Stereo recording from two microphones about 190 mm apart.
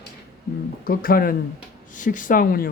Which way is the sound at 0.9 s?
50° left (ahead or behind).